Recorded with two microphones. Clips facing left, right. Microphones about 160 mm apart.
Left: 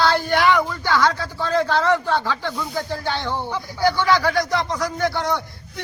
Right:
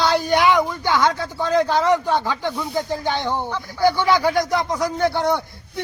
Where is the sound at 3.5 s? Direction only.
10° left (ahead or behind).